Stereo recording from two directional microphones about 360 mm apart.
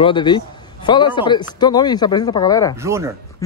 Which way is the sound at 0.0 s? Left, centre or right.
Centre.